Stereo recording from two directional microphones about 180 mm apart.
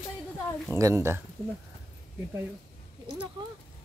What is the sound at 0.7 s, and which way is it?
Speech, 15° right (ahead or behind).